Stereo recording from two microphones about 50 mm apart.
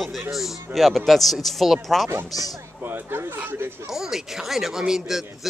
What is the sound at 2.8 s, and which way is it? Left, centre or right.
Speech, right.